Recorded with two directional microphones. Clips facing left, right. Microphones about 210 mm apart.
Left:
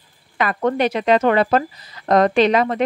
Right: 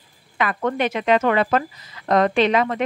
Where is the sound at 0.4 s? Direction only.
35° left (ahead or behind).